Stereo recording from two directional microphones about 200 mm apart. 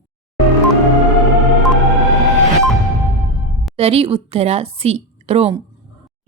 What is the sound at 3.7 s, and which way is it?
A woman's voice, 30° right (ahead or behind).